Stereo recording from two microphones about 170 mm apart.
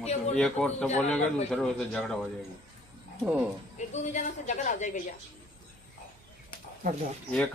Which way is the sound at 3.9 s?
45° left (ahead or behind).